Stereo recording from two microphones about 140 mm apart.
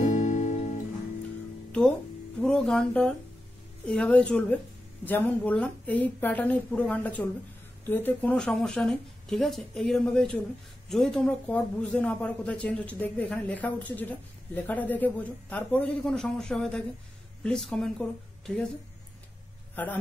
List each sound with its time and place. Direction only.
0.0 s music: 60° left (ahead or behind)
2.4 s a man's voice: 5° left (ahead or behind)
19.7 s a man's voice: 10° left (ahead or behind)